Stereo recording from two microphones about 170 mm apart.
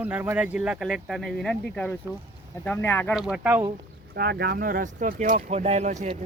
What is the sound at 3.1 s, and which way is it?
Speech, 5° right (ahead or behind).